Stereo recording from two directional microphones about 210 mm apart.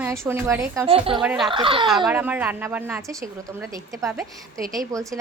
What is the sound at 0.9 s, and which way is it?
Speech, 25° right (ahead or behind).